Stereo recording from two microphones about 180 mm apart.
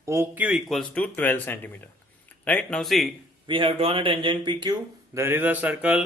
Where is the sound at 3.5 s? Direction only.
30° right (ahead or behind).